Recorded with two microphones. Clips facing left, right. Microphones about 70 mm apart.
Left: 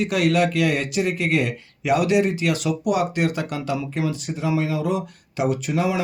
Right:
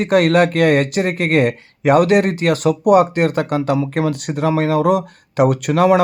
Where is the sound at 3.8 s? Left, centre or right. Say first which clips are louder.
Right 6 dB; right.